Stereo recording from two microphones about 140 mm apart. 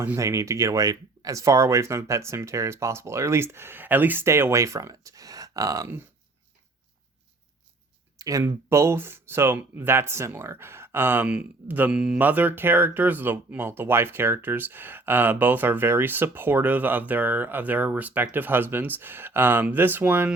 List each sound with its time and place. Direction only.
0.0 s speech: 20° right (ahead or behind)
8.2 s speech: 25° right (ahead or behind)